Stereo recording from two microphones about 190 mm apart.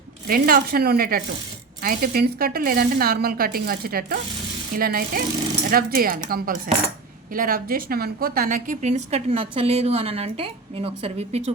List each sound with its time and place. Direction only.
0.3 s a woman's voice: 50° right (ahead or behind); by 11.5 s 35° right (ahead or behind)